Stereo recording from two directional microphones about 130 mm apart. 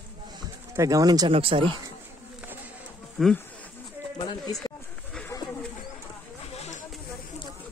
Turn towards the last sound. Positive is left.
turn(degrees=55)  # may be behind; listen again after turning